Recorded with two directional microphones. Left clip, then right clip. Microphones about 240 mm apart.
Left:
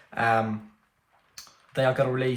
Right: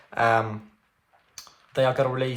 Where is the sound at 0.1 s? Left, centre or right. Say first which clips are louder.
Right 2 dB; centre.